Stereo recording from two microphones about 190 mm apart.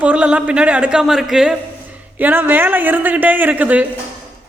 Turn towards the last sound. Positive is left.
turn(degrees=-10)  # may be behind; listen again after turning